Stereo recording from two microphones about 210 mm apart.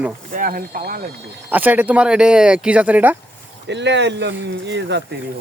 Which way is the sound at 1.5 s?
10° right (ahead or behind).